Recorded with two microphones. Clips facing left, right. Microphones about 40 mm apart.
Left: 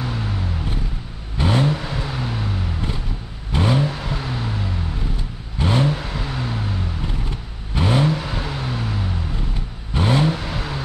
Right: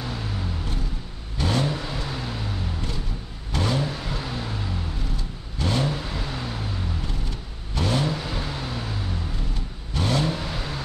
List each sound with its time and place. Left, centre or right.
1.4 s vehicle: left
5.6 s vehicle: left